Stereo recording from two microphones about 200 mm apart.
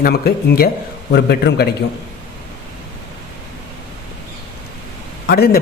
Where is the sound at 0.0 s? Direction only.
50° left (ahead or behind).